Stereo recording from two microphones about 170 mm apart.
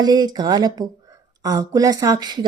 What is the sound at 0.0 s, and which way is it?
A woman's voice, 25° right (ahead or behind).